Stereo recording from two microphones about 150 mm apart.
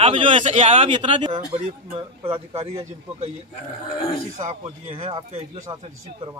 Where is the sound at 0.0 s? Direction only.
40° right (ahead or behind).